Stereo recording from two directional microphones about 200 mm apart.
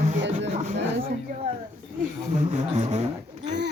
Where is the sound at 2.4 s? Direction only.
35° right (ahead or behind).